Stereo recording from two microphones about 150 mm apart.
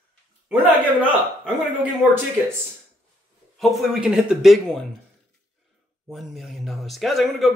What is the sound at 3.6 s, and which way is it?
A man's voice, 5° right (ahead or behind).